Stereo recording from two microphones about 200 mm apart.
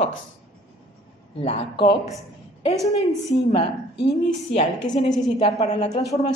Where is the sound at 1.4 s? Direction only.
30° left (ahead or behind).